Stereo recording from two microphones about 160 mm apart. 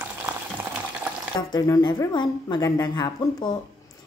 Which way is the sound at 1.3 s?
25° left (ahead or behind).